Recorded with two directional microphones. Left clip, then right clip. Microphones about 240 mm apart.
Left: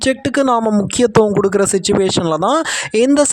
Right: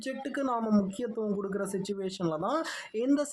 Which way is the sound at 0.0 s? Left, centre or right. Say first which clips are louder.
Left 18 dB; left.